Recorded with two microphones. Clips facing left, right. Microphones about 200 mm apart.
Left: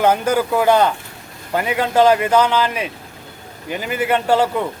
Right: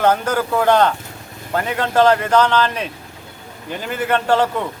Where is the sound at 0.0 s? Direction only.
10° left (ahead or behind).